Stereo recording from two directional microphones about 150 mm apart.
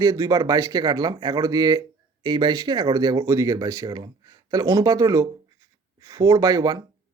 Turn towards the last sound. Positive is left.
turn(degrees=-25)  # may be behind; listen again after turning